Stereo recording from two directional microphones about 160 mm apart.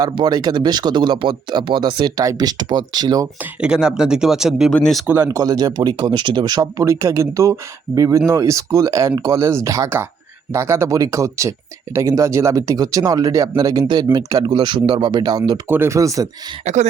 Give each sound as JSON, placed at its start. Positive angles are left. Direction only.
{"t": 0.0, "sound": "speech", "side_deg": -25}
{"t": 3.6, "sound": "speech", "side_deg": -5}
{"t": 5.1, "sound": "speech", "side_deg": -20}
{"t": 16.6, "sound": "a sound", "side_deg": -45}